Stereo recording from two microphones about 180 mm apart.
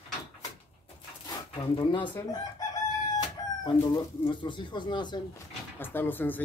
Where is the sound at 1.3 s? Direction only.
25° left (ahead or behind).